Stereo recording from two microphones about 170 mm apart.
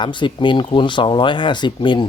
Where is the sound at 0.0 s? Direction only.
30° left (ahead or behind).